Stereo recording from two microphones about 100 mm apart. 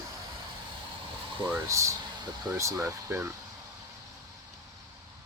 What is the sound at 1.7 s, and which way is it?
Speech, 30° right (ahead or behind).